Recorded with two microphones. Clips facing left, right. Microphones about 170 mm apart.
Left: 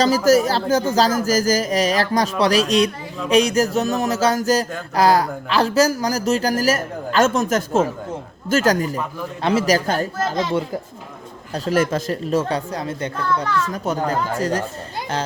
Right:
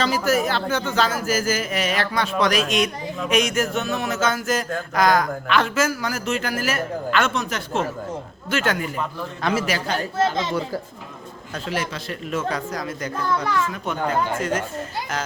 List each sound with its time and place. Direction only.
0.0 s speech: 40° left (ahead or behind)
11.5 s speech: 40° left (ahead or behind)
13.4 s a child's voice: 15° right (ahead or behind)
13.7 s speech: 40° left (ahead or behind)